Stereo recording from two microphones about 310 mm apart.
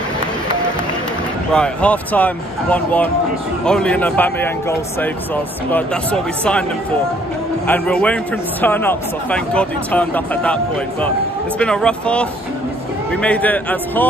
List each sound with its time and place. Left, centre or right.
1.5 s a man's voice: centre
7.6 s a man's voice: centre